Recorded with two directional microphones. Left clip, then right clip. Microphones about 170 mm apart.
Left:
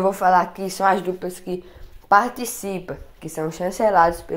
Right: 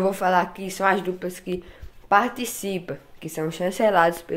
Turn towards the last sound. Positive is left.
turn(degrees=-15)  # may be behind; listen again after turning